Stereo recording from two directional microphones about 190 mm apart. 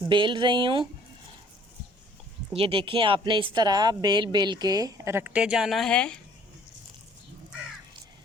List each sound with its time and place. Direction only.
0.1 s speech: 25° right (ahead or behind)
2.5 s speech: 30° right (ahead or behind); by 6.1 s 5° left (ahead or behind)